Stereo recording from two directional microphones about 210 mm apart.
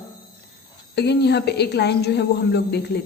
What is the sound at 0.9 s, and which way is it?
A woman's voice, 55° left (ahead or behind).